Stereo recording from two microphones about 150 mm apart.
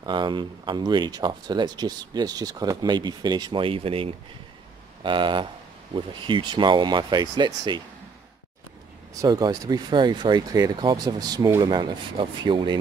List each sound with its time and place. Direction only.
0.0 s speech: 30° right (ahead or behind)
9.1 s speech: 25° right (ahead or behind)